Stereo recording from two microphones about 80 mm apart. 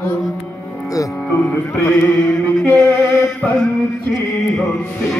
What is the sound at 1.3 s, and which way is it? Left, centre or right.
Speech, left.